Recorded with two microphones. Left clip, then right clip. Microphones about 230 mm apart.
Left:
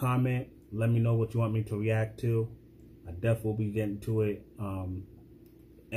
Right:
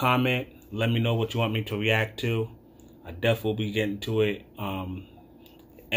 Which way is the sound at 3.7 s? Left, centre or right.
Centre.